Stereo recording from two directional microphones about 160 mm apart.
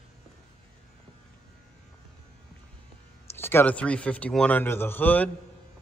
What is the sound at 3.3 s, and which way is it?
A man's voice, 15° left (ahead or behind).